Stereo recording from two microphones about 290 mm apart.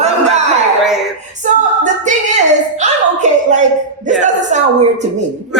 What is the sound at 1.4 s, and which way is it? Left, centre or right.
Speech, right.